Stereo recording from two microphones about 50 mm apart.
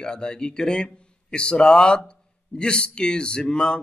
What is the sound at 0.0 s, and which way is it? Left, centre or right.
A man's voice, centre.